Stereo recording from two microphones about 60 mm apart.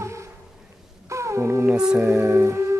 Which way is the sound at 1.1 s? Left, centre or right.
Right.